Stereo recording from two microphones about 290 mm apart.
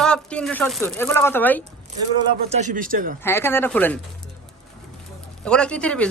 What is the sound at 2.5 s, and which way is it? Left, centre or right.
Speech, right.